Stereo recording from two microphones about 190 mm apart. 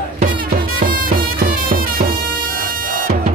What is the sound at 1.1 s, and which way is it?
Music, 50° right (ahead or behind).